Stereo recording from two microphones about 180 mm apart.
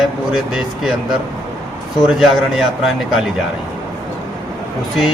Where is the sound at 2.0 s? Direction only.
Centre (ahead or behind).